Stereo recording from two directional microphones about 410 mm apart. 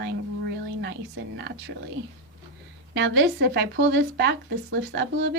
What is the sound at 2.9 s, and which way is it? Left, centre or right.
A woman's voice, right.